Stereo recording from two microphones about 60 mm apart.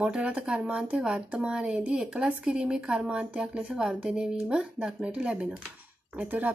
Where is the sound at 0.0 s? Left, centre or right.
Centre.